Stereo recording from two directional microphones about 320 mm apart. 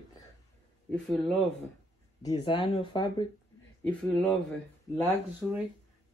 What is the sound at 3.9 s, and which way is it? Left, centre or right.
Speech, centre.